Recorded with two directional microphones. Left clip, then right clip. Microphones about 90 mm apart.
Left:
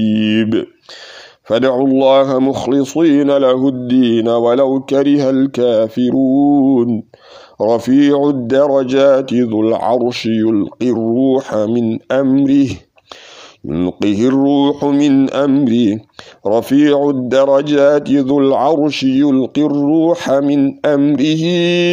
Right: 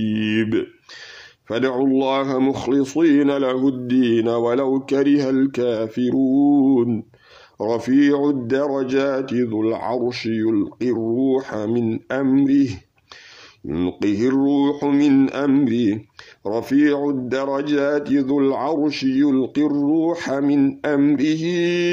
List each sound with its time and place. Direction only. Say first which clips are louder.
0.0 s a sound: left 6 dB; 50° left (ahead or behind)
1.5 s a man's voice: left 7 dB; 65° left (ahead or behind); by 6.9 s 45° left (ahead or behind)
7.5 s speech: left 7 dB; 65° left (ahead or behind); by 12.7 s 90° left
13.7 s speech: left 5 dB; 50° left (ahead or behind)
13.9 s speech: left 6 dB; 90° left